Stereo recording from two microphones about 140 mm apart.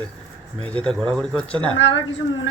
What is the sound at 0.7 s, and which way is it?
Speech, 5° left (ahead or behind).